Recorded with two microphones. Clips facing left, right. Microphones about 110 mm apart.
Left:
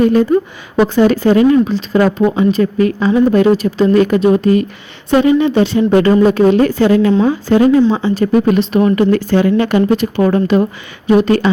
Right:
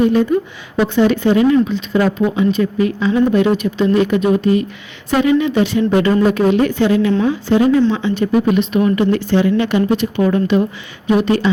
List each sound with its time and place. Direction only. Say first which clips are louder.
0.0 s speech: left 3 dB; 45° left (ahead or behind)
3.9 s speech: left 3 dB; 50° left (ahead or behind)
4.2 s speech: left 3 dB; 30° left (ahead or behind)